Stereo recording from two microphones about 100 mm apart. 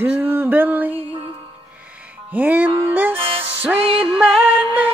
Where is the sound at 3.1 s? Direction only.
70° right (ahead or behind).